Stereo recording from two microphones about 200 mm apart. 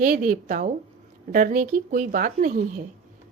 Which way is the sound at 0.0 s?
40° right (ahead or behind).